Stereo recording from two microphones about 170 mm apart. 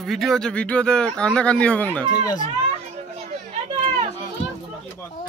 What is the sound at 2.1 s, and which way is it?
Speech, 20° left (ahead or behind).